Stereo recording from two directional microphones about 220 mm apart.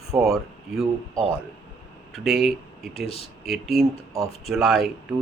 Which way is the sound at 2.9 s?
25° left (ahead or behind).